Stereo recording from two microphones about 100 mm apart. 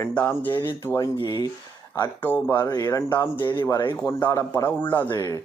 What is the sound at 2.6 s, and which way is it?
Speech, 35° left (ahead or behind).